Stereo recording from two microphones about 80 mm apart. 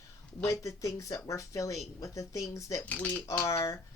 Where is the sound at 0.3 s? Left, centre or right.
Left.